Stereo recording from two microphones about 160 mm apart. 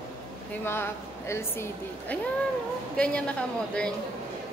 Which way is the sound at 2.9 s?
5° left (ahead or behind).